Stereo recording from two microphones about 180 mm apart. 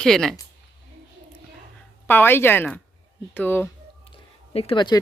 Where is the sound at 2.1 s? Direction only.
10° left (ahead or behind).